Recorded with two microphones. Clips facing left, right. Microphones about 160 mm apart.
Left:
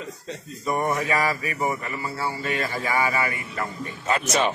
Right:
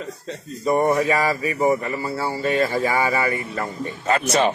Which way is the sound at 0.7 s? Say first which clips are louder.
Right 6 dB; 35° right (ahead or behind).